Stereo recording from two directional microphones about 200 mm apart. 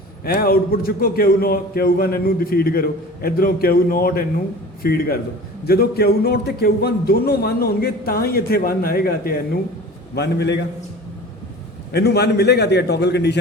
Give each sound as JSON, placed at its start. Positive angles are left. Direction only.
{"t": 0.3, "sound": "a man's voice", "side_deg": 50}
{"t": 11.9, "sound": "a man's voice", "side_deg": 55}